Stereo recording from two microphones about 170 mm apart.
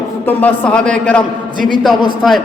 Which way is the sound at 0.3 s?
10° left (ahead or behind).